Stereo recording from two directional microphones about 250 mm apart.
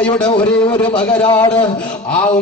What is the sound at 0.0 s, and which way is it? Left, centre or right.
Speech, centre.